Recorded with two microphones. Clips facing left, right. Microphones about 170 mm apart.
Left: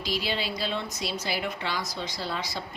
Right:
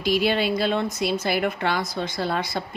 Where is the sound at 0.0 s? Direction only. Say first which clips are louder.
Right 9 dB; 55° right (ahead or behind).